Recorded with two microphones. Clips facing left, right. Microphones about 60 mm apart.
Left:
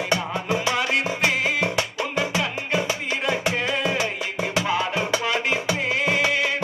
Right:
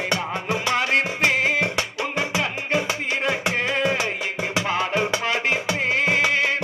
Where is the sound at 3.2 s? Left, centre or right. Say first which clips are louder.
Left 1 dB; right.